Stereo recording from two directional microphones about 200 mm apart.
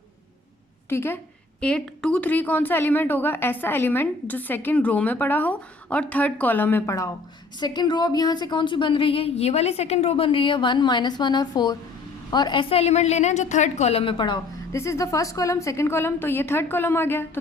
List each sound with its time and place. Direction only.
0.9 s a woman's voice: 10° left (ahead or behind)